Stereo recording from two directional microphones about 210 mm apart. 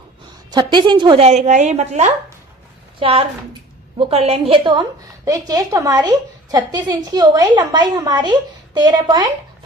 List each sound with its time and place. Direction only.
0.5 s a woman's voice: 20° right (ahead or behind)